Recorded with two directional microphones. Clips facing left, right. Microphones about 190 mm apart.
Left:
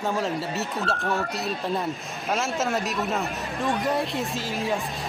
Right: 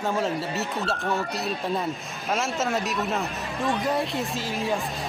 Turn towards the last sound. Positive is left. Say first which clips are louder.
# even
turn(degrees=0)  # may be behind; listen again after turning